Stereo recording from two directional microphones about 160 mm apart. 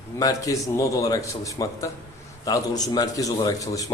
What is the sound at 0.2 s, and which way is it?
A man's voice, 20° left (ahead or behind).